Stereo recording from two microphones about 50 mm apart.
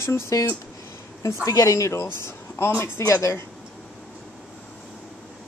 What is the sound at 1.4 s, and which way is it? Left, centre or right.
Speech, left.